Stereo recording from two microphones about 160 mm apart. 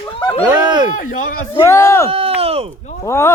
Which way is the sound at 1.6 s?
15° left (ahead or behind).